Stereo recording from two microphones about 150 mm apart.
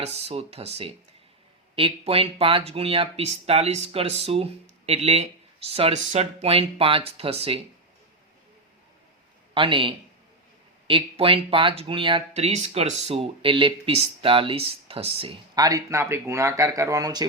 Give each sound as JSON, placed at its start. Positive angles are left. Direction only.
{"t": 0.0, "sound": "speech", "side_deg": -40}
{"t": 9.6, "sound": "speech", "side_deg": -35}
{"t": 12.3, "sound": "speech", "side_deg": -50}
{"t": 15.5, "sound": "speech", "side_deg": -25}